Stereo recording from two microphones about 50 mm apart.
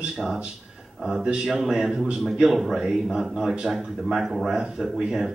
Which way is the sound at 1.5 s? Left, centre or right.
Centre.